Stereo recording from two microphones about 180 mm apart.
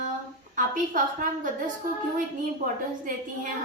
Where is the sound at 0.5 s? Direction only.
45° right (ahead or behind).